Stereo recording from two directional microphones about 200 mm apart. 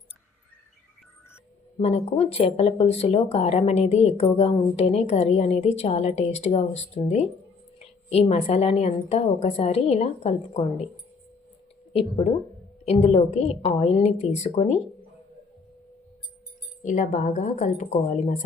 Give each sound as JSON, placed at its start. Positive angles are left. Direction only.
{"t": 1.8, "sound": "speech", "side_deg": 30}
{"t": 11.9, "sound": "speech", "side_deg": 30}
{"t": 16.8, "sound": "speech", "side_deg": 40}